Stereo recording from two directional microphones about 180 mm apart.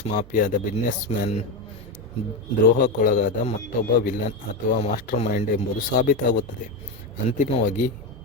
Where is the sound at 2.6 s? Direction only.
50° left (ahead or behind).